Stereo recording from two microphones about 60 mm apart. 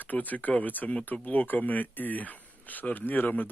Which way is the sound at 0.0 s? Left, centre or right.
Left.